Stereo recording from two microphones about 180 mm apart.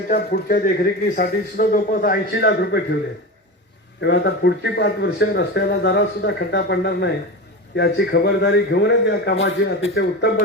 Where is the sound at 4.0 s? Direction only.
70° left (ahead or behind).